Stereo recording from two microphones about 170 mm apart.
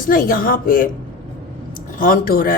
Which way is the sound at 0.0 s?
55° left (ahead or behind).